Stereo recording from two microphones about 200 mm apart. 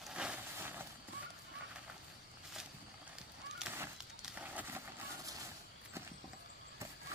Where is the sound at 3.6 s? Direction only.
10° right (ahead or behind).